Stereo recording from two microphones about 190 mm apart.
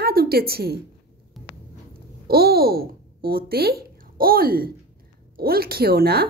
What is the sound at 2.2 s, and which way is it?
Speech, 55° right (ahead or behind).